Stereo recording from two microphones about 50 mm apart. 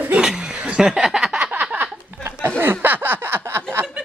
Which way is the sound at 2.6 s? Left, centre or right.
Right.